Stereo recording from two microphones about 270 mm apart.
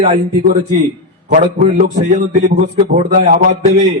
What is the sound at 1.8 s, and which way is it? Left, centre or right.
A man's voice, right.